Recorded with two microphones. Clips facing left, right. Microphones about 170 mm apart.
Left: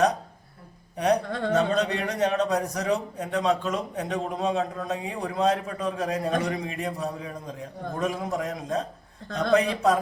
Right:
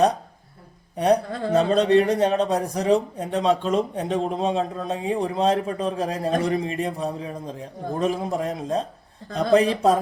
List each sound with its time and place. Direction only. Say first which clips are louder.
1.3 s speech: right 1 dB; 5° right (ahead or behind)
1.5 s a man's voice: right 8 dB; 30° right (ahead or behind)